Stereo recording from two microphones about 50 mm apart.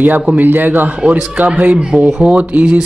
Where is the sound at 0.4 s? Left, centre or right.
Right.